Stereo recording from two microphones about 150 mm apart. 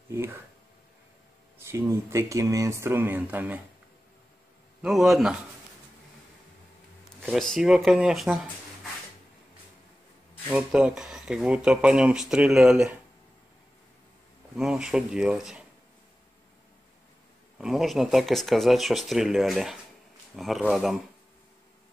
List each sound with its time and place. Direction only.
0.1 s speech: 15° right (ahead or behind)
1.6 s speech: 15° right (ahead or behind)
4.8 s speech: centre (ahead or behind)
7.2 s speech: 5° left (ahead or behind)
10.5 s speech: 5° right (ahead or behind)
14.5 s speech: centre (ahead or behind)
17.6 s speech: centre (ahead or behind)